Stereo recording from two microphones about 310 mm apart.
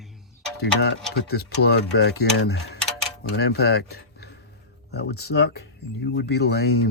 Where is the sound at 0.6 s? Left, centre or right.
Left.